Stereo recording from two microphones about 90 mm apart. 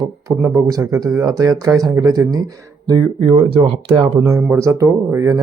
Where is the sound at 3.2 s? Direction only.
90° right.